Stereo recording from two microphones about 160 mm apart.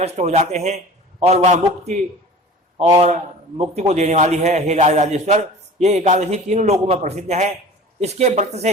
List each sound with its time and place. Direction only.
0.0 s a man's voice: 40° right (ahead or behind)
3.6 s a man's voice: 45° right (ahead or behind)